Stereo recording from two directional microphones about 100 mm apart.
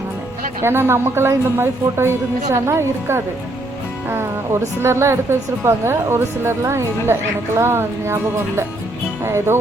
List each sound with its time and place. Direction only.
0.6 s speech: 25° right (ahead or behind)
4.8 s speech: 25° right (ahead or behind)